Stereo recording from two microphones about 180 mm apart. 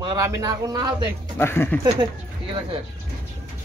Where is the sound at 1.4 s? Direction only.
10° left (ahead or behind).